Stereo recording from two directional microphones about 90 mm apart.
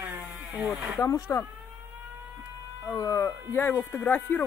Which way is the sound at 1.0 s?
35° left (ahead or behind).